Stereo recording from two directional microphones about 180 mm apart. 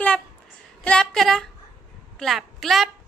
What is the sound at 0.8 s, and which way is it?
Female singing, 5° left (ahead or behind).